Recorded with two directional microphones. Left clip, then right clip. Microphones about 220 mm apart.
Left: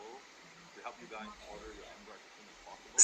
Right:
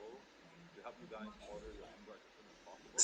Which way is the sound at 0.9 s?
25° left (ahead or behind).